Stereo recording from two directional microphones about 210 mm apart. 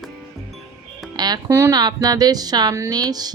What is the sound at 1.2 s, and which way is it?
Speech, 15° right (ahead or behind).